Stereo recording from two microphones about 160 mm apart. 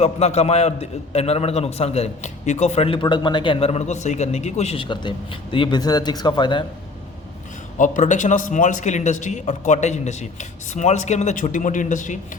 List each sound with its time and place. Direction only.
0.0 s a man's voice: 45° left (ahead or behind)
7.8 s speech: 50° left (ahead or behind)